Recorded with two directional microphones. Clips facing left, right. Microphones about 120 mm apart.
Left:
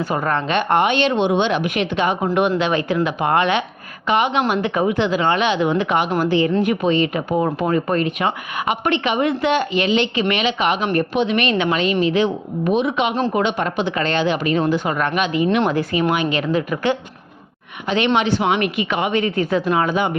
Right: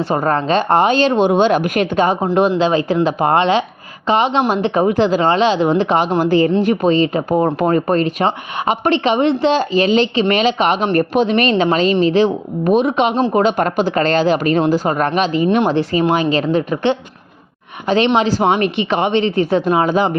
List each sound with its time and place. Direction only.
0.0 s speech: 35° right (ahead or behind)
2.2 s a woman's voice: 30° right (ahead or behind)